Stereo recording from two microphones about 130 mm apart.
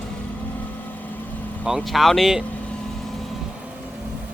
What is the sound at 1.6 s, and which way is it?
Speech, centre (ahead or behind).